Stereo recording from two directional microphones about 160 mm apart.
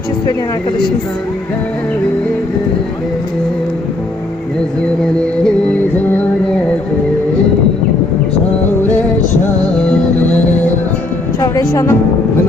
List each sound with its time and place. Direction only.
5.4 s music: 5° left (ahead or behind)
9.8 s music: 10° left (ahead or behind)
11.3 s speech: 25° left (ahead or behind)